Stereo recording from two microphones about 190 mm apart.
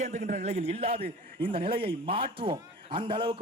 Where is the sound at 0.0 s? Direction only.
40° right (ahead or behind).